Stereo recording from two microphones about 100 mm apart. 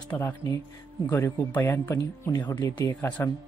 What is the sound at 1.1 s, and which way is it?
Speech, 20° left (ahead or behind).